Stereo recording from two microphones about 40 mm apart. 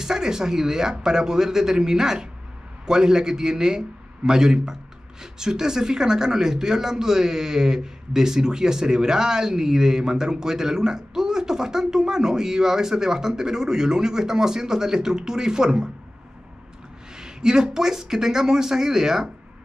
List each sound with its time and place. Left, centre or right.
0.0 s speech: centre
17.1 s speech: centre